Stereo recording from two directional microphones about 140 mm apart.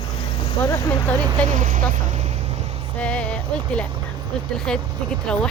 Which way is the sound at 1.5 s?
60° right (ahead or behind).